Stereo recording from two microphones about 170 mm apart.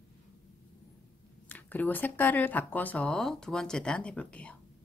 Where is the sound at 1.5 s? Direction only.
10° left (ahead or behind).